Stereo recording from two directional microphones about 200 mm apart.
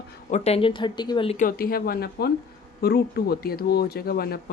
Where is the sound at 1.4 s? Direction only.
45° left (ahead or behind).